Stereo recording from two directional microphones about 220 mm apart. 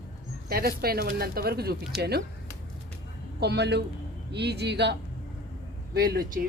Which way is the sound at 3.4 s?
50° right (ahead or behind).